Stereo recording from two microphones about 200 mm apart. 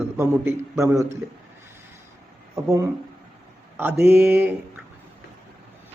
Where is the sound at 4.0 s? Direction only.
10° right (ahead or behind).